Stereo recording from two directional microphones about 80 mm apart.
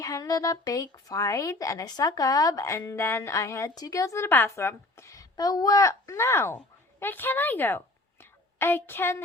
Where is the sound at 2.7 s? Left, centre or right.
Left.